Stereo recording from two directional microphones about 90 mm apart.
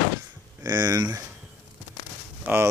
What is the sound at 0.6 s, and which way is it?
Speech, 45° right (ahead or behind).